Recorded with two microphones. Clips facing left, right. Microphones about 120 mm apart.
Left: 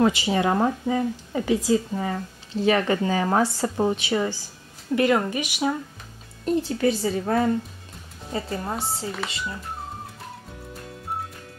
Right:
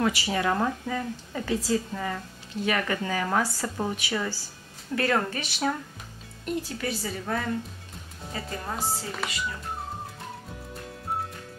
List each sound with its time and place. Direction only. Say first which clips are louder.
0.0 s speech: left 5 dB; 20° left (ahead or behind)
4.9 s speech: left 5 dB; 15° left (ahead or behind)
6.4 s speech: left 9 dB; 25° left (ahead or behind)
8.7 s speech: left 2 dB; centre (ahead or behind)